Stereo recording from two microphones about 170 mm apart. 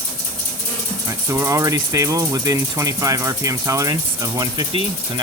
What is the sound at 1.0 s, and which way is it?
Speech, 15° right (ahead or behind).